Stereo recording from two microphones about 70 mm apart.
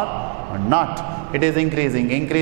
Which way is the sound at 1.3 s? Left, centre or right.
Centre.